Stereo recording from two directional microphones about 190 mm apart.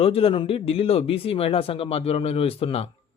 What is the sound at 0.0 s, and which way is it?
Speech, 30° left (ahead or behind).